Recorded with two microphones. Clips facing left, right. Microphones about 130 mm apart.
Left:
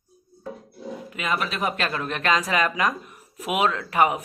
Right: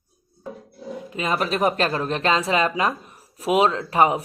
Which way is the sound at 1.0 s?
35° right (ahead or behind).